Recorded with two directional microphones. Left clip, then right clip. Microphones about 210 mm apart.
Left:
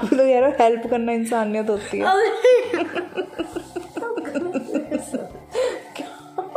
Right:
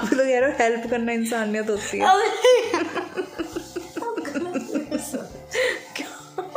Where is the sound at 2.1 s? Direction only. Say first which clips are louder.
Left 3 dB; 10° right (ahead or behind).